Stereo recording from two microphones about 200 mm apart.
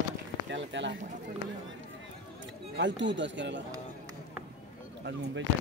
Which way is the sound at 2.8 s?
65° right (ahead or behind).